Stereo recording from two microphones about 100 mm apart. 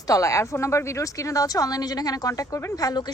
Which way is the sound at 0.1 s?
30° left (ahead or behind).